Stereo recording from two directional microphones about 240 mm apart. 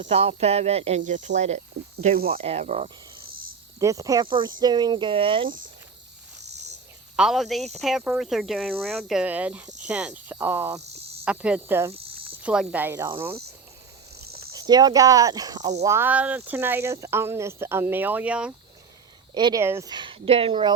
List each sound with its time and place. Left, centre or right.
0.0 s cricket: right
3.8 s speech: centre
4.6 s cricket: centre
7.2 s cricket: centre
11.9 s cricket: right
12.4 s speech: centre
14.5 s speech: centre
19.3 s cricket: centre